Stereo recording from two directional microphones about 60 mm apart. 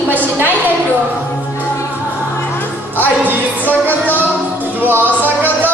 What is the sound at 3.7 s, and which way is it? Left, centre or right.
Music, left.